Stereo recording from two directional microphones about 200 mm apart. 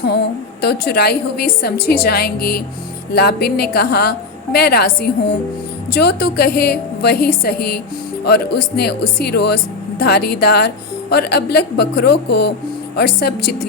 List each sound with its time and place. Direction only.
0.6 s a woman's voice: 55° left (ahead or behind)